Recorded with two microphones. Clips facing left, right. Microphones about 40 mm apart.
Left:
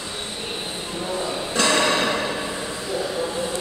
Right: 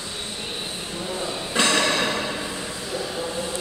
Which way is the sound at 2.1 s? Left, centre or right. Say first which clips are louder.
Left 2 dB; centre.